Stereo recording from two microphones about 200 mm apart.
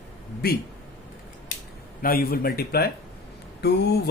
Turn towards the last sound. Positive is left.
turn(degrees=55)  # may be behind; listen again after turning